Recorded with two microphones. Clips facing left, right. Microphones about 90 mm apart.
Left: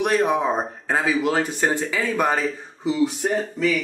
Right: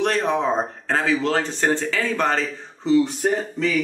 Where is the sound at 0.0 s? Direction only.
10° left (ahead or behind).